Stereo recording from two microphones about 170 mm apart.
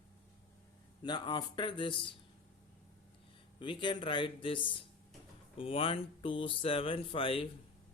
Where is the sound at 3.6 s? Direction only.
25° left (ahead or behind).